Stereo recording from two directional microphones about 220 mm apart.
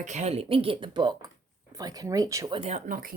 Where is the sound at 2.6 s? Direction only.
30° right (ahead or behind).